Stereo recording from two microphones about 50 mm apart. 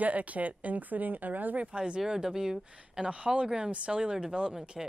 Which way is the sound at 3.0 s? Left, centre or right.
Right.